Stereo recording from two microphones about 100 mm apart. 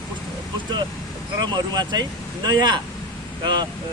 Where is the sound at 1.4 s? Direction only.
45° right (ahead or behind).